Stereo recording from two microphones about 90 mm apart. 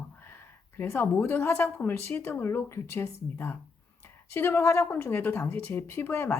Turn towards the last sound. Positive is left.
turn(degrees=25)  # may be behind; listen again after turning